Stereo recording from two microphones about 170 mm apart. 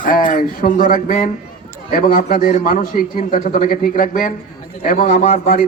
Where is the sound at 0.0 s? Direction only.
55° left (ahead or behind).